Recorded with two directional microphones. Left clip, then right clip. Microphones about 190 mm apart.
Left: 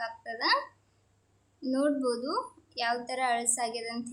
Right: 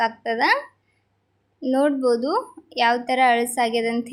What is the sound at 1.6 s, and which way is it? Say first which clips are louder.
A woman's voice: right 9 dB; 25° right (ahead or behind).